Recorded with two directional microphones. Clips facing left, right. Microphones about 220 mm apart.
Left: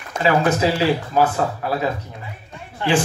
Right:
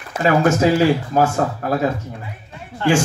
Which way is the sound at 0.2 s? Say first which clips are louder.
Right 2 dB; 45° right (ahead or behind).